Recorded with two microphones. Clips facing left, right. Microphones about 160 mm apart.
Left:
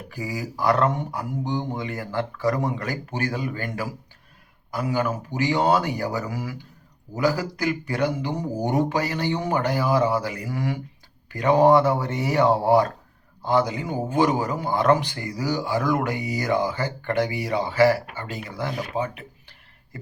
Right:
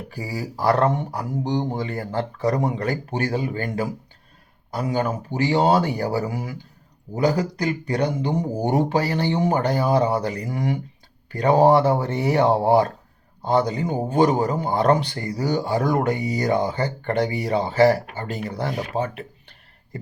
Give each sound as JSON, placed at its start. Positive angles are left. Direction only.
{"t": 0.1, "sound": "speech", "side_deg": -35}
{"t": 13.5, "sound": "speech", "side_deg": -40}